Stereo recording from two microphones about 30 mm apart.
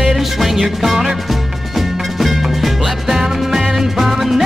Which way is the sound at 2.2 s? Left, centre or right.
Centre.